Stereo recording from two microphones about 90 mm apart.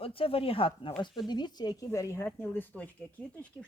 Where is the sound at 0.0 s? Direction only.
90° left.